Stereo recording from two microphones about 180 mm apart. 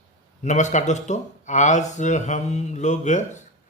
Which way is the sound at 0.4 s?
40° left (ahead or behind).